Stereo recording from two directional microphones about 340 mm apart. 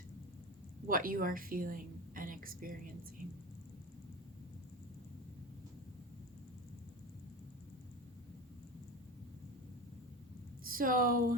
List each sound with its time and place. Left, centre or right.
0.9 s a woman's voice: right
10.6 s speech: right